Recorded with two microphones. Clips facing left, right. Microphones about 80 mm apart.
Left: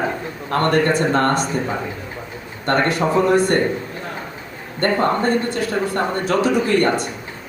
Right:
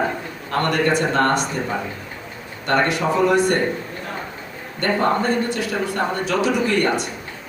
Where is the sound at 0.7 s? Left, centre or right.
Left.